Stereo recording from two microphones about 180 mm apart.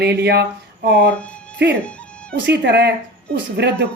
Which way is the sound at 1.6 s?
65° right (ahead or behind).